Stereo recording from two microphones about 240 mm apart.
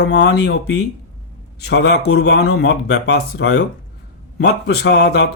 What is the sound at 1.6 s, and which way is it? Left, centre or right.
Speech, left.